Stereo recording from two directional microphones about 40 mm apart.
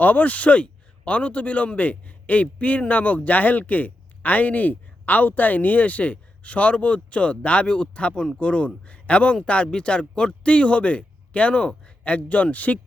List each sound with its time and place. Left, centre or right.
0.0 s speech: left